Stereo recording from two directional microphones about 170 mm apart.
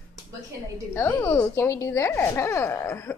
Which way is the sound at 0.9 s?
10° left (ahead or behind).